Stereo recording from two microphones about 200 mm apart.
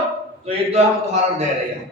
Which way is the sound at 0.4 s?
35° right (ahead or behind).